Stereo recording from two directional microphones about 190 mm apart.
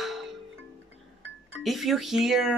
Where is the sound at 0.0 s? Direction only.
Centre (ahead or behind).